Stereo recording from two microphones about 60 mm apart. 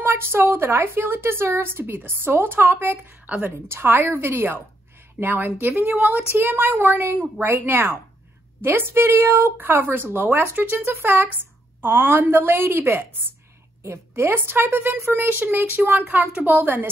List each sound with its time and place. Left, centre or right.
0.0 s speech: right